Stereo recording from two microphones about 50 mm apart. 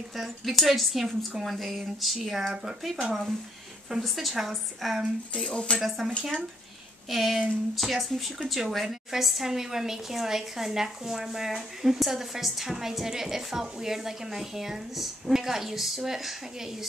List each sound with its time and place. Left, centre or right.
0.1 s a woman's voice: centre
5.3 s speech: centre
5.8 s a woman's voice: centre
7.1 s a woman's voice: centre